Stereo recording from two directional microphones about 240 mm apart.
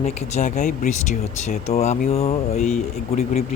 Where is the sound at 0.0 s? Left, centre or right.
Left.